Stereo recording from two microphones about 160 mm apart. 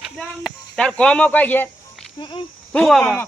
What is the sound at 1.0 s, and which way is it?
Speech, 5° left (ahead or behind).